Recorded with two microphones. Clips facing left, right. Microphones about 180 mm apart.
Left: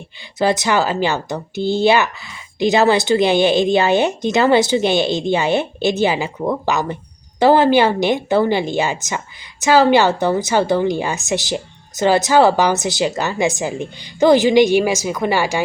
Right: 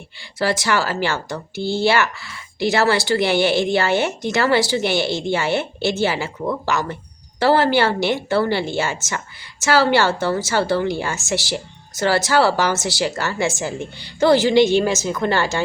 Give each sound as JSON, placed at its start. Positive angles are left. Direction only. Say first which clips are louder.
{"t": 0.3, "sound": "a woman's voice", "louder": "left 4 dB", "side_deg": 20}